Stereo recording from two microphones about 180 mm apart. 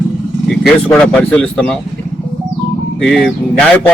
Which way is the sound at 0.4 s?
5° left (ahead or behind).